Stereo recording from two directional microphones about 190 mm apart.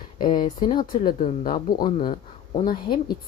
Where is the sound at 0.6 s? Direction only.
25° left (ahead or behind).